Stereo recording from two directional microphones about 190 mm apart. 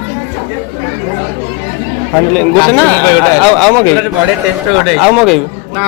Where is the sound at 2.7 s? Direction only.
10° left (ahead or behind).